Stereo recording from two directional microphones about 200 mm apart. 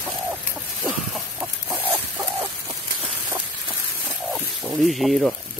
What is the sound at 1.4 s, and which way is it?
Chicken, 10° right (ahead or behind).